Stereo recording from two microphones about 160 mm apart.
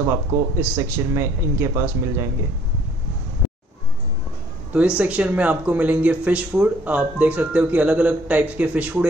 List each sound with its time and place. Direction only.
0.0 s speech: 15° right (ahead or behind)
4.7 s speech: 10° right (ahead or behind)